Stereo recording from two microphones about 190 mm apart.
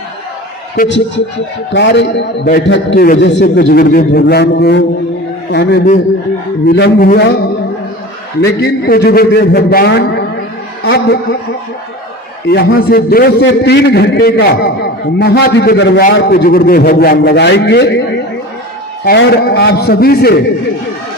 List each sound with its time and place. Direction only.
0.9 s a man's voice: 70° left (ahead or behind)
12.5 s a man's voice: 55° left (ahead or behind)
19.0 s a man's voice: 60° left (ahead or behind)